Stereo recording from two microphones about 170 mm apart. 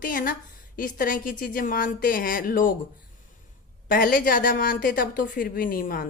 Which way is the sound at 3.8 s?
55° left (ahead or behind).